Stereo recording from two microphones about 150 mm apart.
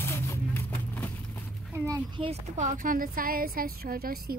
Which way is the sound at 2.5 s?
55° right (ahead or behind).